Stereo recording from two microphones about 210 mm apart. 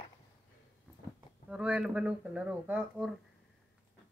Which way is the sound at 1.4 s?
5° right (ahead or behind).